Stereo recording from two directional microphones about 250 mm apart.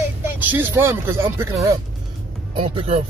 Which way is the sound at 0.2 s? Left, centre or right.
Centre.